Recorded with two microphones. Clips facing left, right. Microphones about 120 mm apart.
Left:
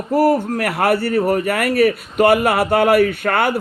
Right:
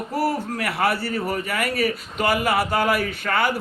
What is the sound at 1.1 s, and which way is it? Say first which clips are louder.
Speech: left 9 dB; 45° left (ahead or behind).